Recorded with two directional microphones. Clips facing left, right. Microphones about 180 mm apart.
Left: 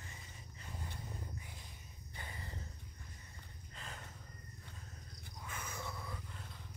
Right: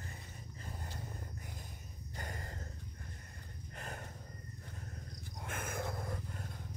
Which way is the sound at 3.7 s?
50° right (ahead or behind).